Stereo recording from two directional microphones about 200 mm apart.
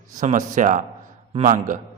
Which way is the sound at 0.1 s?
40° right (ahead or behind).